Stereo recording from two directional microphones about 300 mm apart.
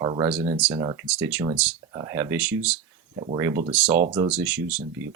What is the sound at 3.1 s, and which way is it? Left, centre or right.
Speech, centre.